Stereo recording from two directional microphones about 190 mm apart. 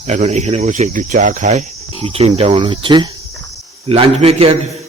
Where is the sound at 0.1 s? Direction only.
35° right (ahead or behind).